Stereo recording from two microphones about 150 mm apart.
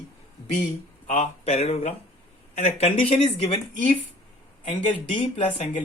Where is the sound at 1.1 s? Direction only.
45° left (ahead or behind).